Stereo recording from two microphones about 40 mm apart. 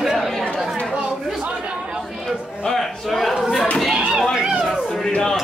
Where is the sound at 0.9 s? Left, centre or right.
Right.